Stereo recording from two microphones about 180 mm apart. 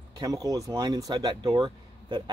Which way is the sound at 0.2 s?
20° right (ahead or behind).